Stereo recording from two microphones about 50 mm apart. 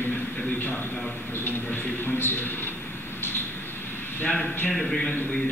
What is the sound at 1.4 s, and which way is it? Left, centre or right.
Speech, left.